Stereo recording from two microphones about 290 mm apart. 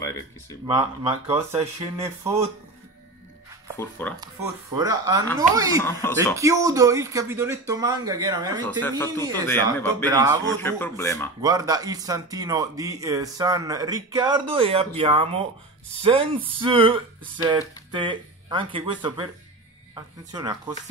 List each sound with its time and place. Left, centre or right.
0.7 s speech: centre
3.7 s a man's voice: centre
4.2 s speech: centre
5.8 s a man's voice: centre
6.1 s speech: centre
8.8 s a man's voice: centre
9.2 s speech: centre
9.5 s a man's voice: centre
10.0 s speech: centre
10.6 s a man's voice: centre
11.4 s speech: centre
20.2 s speech: centre